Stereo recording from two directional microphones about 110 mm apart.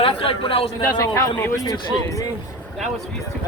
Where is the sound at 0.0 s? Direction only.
55° left (ahead or behind).